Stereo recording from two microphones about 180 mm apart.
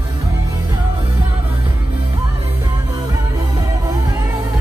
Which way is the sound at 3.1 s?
20° right (ahead or behind).